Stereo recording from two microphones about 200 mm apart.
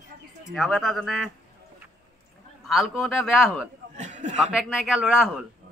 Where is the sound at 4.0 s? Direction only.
35° right (ahead or behind).